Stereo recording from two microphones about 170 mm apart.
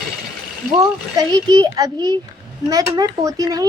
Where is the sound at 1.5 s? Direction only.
25° right (ahead or behind).